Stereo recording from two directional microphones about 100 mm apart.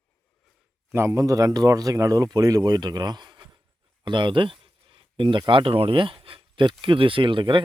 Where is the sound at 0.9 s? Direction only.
25° right (ahead or behind).